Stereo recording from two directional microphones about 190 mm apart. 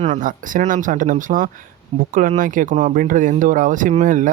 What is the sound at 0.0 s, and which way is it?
Speech, 40° right (ahead or behind).